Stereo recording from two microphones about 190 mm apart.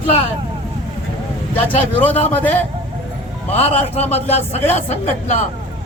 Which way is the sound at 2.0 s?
10° left (ahead or behind).